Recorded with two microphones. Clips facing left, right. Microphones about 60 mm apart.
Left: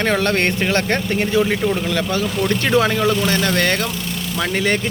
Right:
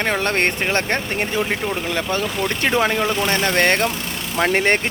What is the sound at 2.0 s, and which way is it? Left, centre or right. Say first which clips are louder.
Speech: left 2 dB; right.